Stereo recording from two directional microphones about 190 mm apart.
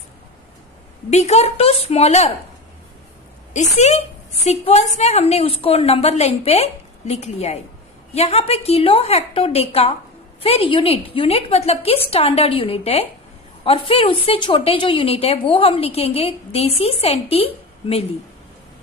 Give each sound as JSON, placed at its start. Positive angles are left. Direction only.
{"t": 1.1, "sound": "a woman's voice", "side_deg": 35}
{"t": 3.5, "sound": "a woman's voice", "side_deg": 35}